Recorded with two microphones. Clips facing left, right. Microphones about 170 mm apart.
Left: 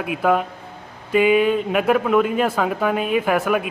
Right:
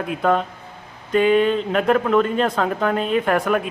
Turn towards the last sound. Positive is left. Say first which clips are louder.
# even
turn(degrees=5)  # may be behind; listen again after turning